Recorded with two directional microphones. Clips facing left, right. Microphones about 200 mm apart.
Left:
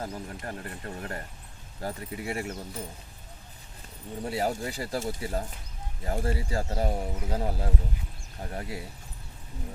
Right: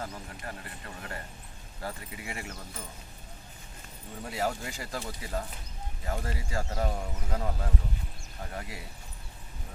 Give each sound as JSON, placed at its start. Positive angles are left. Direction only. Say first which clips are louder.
{"t": 0.0, "sound": "speech", "louder": "left 4 dB", "side_deg": 35}
{"t": 4.2, "sound": "speech", "louder": "left 3 dB", "side_deg": 30}